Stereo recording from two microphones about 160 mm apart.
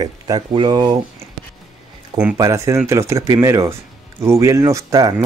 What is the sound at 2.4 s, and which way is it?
Speech, 20° right (ahead or behind).